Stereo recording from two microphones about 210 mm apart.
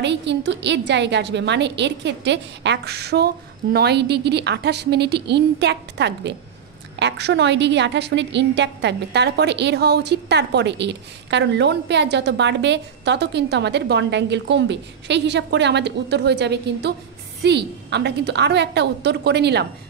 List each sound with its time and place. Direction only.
0.0 s a woman's voice: 55° right (ahead or behind)